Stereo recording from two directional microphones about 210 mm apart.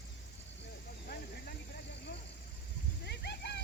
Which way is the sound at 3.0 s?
50° left (ahead or behind).